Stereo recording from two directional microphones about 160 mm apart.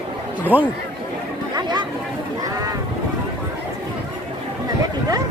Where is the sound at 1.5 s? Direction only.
25° right (ahead or behind).